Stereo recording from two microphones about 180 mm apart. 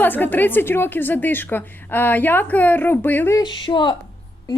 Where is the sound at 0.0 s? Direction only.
10° left (ahead or behind).